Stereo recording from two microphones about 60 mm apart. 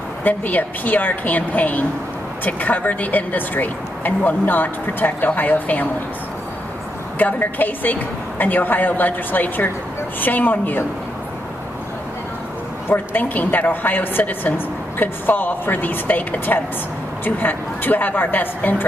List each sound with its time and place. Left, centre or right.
0.2 s speech: left
7.2 s a woman's voice: left
12.8 s a woman's voice: left